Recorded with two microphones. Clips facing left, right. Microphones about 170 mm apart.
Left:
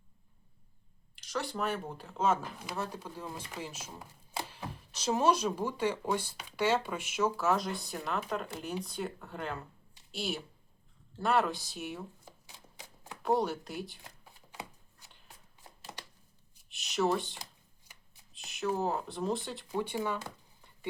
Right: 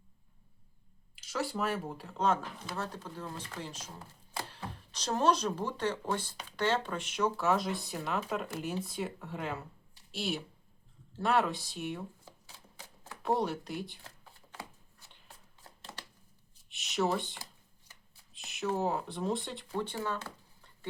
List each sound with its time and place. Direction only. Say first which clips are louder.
1.1 s speech: right 1 dB; 5° right (ahead or behind)
13.2 s speech: left 1 dB; centre (ahead or behind)
14.5 s shuffling cards: left 1 dB; 15° left (ahead or behind)
16.6 s a sound: left 1 dB; centre (ahead or behind)
17.4 s shuffling cards: left 1 dB; 20° left (ahead or behind)
18.3 s speech: even; centre (ahead or behind)
19.7 s speech: left 2 dB; 10° left (ahead or behind)